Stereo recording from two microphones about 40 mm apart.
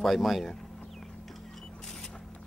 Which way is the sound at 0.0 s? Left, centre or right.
Centre.